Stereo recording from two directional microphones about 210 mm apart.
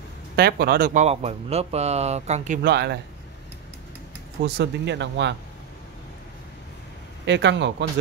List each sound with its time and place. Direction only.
0.4 s speech: 50° right (ahead or behind)
2.6 s speech: 50° right (ahead or behind)
4.4 s speech: 55° right (ahead or behind)
7.2 s speech: 55° right (ahead or behind)